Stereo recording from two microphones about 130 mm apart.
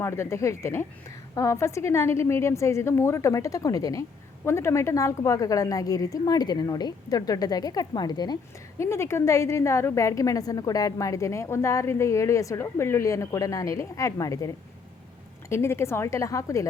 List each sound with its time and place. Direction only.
0.0 s a woman's voice: 20° left (ahead or behind)
8.8 s a woman's voice: 20° left (ahead or behind)